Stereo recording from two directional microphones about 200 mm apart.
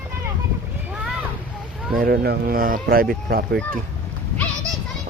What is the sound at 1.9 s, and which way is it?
Speech, 50° right (ahead or behind).